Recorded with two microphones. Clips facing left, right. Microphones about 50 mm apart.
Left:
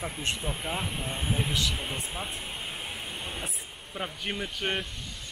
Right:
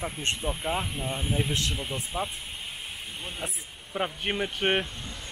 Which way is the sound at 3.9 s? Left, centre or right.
Centre.